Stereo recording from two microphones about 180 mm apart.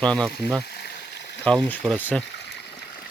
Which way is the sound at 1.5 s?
5° left (ahead or behind).